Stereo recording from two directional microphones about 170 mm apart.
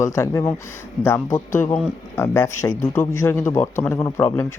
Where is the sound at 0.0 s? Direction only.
15° left (ahead or behind).